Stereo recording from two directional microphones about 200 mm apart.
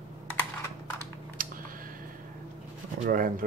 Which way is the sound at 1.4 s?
45° right (ahead or behind).